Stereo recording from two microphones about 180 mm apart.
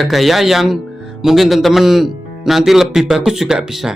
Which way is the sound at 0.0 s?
Centre (ahead or behind).